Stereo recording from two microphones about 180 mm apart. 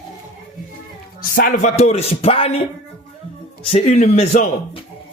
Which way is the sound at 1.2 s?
50° left (ahead or behind).